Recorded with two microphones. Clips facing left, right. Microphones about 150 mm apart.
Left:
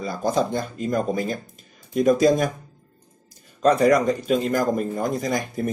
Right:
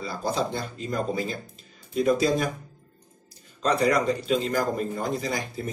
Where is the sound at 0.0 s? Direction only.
45° left (ahead or behind).